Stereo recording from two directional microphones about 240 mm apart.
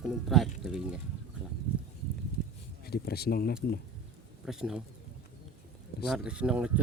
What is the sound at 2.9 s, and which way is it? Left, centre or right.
Speech, left.